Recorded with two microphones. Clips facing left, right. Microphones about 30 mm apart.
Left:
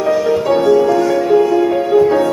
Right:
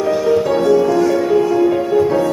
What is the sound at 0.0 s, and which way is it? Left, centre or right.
Music, centre.